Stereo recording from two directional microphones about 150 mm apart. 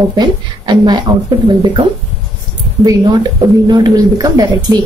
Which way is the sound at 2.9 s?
25° right (ahead or behind).